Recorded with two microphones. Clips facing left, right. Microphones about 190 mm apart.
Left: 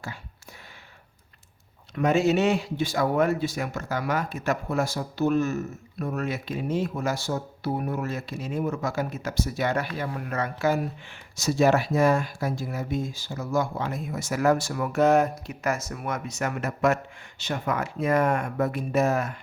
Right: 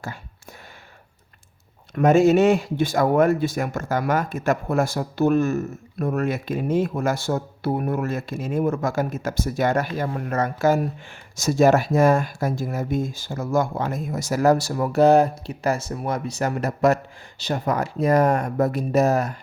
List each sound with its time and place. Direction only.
2.0 s speech: 50° right (ahead or behind)